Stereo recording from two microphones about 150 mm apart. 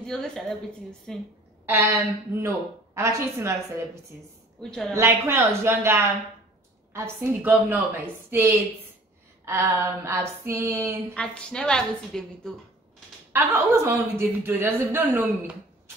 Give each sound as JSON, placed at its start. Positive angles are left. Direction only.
{"t": 0.0, "sound": "a woman's voice", "side_deg": 5}
{"t": 1.7, "sound": "a woman's voice", "side_deg": -20}
{"t": 4.6, "sound": "a woman's voice", "side_deg": 5}
{"t": 4.9, "sound": "a woman's voice", "side_deg": -15}
{"t": 11.1, "sound": "a woman's voice", "side_deg": 5}
{"t": 13.3, "sound": "a woman's voice", "side_deg": -20}